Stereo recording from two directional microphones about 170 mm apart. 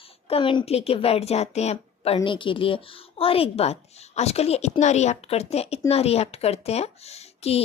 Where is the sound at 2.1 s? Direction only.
30° left (ahead or behind).